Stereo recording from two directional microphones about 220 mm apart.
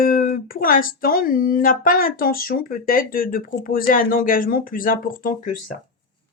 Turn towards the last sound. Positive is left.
turn(degrees=40)  # may be behind; listen again after turning